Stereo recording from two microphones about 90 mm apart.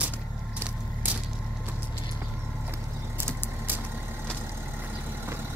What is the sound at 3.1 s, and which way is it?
Vehicle, 25° right (ahead or behind).